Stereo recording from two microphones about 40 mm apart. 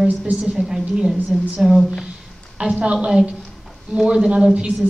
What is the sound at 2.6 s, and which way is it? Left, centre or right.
Speech, right.